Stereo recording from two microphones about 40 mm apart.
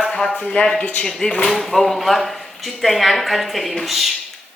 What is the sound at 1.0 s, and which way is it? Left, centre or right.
Speech, left.